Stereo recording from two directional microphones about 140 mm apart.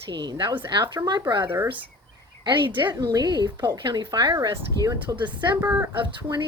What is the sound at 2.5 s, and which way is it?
A woman's voice, 35° right (ahead or behind).